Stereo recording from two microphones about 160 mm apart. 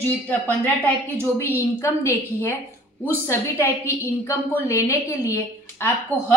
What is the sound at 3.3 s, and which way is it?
A woman's voice, 15° left (ahead or behind).